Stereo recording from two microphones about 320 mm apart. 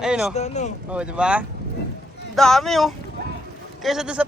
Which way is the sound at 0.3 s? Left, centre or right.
Left.